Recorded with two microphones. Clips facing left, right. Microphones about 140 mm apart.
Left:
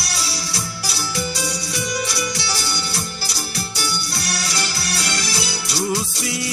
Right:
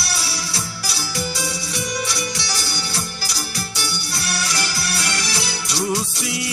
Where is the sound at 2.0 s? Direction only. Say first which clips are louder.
Left 1 dB; 45° left (ahead or behind).